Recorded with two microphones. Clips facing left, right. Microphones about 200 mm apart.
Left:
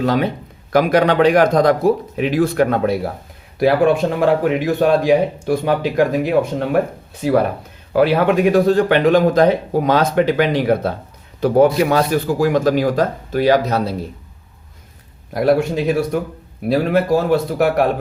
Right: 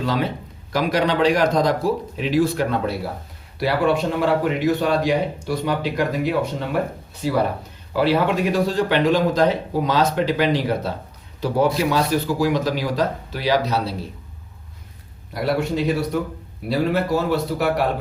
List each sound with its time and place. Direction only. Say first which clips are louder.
0.0 s speech: left 5 dB; 55° left (ahead or behind)
15.3 s speech: left 6 dB; 50° left (ahead or behind)